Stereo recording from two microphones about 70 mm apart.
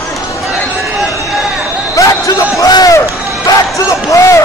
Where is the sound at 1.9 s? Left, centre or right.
Left.